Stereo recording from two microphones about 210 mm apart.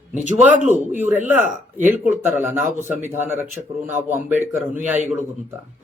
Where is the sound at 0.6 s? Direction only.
10° right (ahead or behind).